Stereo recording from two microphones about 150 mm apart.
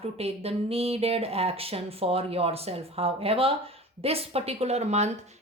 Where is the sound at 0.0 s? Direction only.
45° right (ahead or behind).